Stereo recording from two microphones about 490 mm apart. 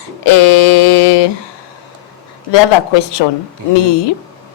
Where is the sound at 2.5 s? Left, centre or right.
Left.